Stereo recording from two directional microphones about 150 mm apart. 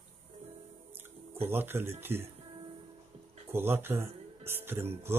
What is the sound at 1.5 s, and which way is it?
Speech, 15° right (ahead or behind).